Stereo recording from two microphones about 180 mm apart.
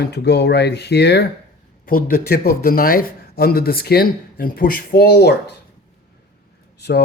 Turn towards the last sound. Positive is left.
turn(degrees=65)  # may be behind; listen again after turning